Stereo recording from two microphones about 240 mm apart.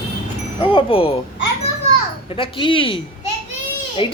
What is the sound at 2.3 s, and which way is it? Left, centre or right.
Speech, left.